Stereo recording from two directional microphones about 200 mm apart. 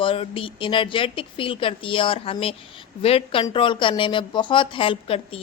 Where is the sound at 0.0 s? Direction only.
25° left (ahead or behind).